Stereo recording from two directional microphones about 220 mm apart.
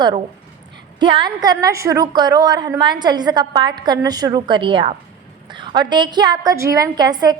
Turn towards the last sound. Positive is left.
turn(degrees=-20)  # may be behind; listen again after turning